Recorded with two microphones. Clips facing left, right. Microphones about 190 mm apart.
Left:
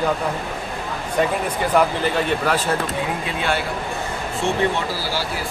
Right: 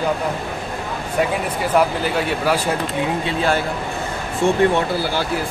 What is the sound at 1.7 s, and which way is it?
Speech, 5° right (ahead or behind).